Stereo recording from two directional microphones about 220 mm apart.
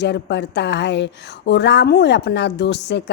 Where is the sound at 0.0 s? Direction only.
50° left (ahead or behind).